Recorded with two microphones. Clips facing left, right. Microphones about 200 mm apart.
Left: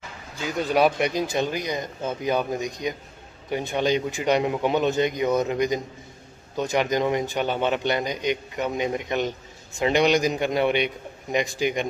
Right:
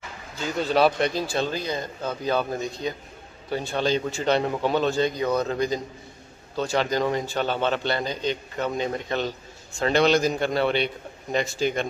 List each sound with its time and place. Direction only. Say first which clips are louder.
0.4 s a man's voice: even; 15° left (ahead or behind)